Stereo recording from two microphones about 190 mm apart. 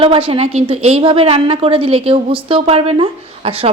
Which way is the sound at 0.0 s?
30° right (ahead or behind).